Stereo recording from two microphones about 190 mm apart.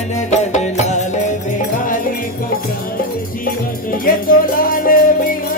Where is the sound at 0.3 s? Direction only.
35° left (ahead or behind).